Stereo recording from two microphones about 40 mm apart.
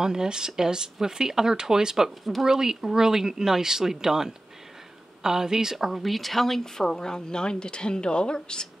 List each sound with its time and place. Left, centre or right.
0.0 s speech: centre; by 8.6 s left